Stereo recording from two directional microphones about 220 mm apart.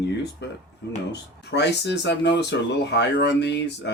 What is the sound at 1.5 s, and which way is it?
Speech, 50° left (ahead or behind).